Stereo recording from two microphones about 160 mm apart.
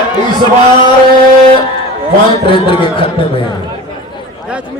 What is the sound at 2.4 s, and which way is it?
Speech, 30° left (ahead or behind).